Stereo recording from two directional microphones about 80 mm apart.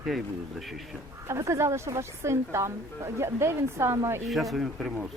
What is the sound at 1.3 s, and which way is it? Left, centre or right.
Speech, right.